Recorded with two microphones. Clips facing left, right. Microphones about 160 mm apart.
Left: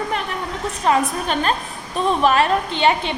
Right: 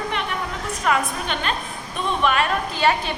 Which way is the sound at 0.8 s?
35° left (ahead or behind).